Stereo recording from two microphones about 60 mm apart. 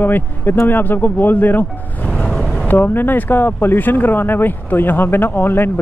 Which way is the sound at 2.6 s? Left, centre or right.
Left.